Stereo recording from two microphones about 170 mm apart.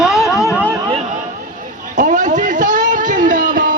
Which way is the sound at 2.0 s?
50° right (ahead or behind).